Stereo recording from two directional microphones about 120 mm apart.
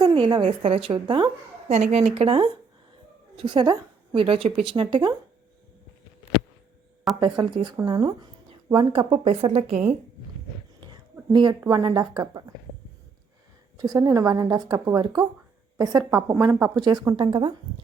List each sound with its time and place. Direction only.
0.1 s a woman's voice: 40° right (ahead or behind)
0.6 s a woman's voice: 55° right (ahead or behind)
0.9 s a woman's voice: 40° right (ahead or behind)
1.6 s a woman's voice: 65° right (ahead or behind); by 5.1 s 40° right (ahead or behind)
7.2 s a woman's voice: 40° right (ahead or behind); by 9.8 s 60° right (ahead or behind)
11.3 s a woman's voice: 40° right (ahead or behind)
13.7 s a woman's voice: 30° right (ahead or behind)
16.5 s speech: 15° right (ahead or behind)
16.7 s a woman's voice: 35° right (ahead or behind)
17.2 s a woman's voice: 45° right (ahead or behind)